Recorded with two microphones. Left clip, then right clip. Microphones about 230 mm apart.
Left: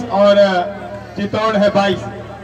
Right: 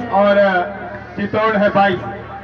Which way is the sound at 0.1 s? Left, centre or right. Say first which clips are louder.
Left 2 dB; left.